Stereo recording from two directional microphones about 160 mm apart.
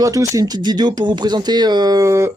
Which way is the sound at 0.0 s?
20° right (ahead or behind).